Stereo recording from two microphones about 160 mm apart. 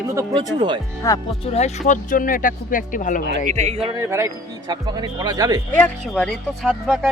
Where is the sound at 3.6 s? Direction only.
40° right (ahead or behind).